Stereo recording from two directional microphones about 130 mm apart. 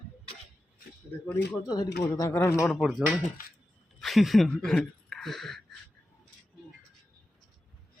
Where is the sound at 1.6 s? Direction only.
30° left (ahead or behind).